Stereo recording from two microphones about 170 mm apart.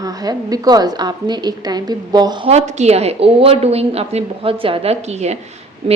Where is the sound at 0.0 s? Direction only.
20° right (ahead or behind).